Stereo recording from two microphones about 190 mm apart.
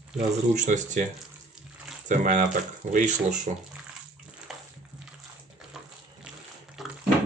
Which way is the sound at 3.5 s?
40° right (ahead or behind).